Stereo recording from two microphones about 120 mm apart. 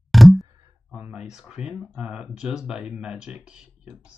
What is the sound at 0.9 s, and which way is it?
Speech, 10° right (ahead or behind).